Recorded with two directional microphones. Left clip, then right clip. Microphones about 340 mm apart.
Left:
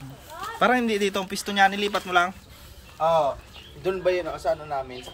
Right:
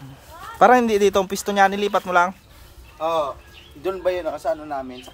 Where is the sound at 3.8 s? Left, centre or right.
Centre.